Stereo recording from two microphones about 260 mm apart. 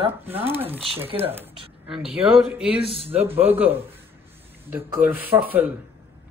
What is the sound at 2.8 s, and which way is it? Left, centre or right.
Speech, right.